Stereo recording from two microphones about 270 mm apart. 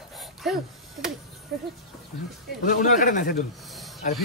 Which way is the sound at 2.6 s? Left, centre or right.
Left.